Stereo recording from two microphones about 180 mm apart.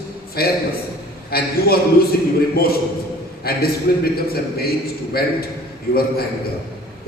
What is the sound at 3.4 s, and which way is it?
A man's voice, 60° left (ahead or behind).